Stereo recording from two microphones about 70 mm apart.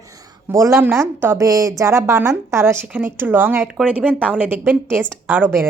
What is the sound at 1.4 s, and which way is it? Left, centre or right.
A woman's voice, right.